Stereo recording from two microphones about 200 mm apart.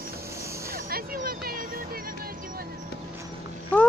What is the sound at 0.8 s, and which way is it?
Music, 50° right (ahead or behind).